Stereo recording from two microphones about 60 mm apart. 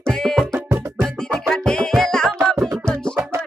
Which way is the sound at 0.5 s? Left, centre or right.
Right.